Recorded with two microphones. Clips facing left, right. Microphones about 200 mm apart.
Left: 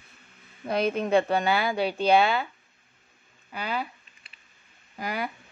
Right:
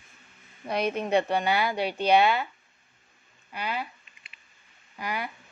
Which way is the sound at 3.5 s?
45° left (ahead or behind).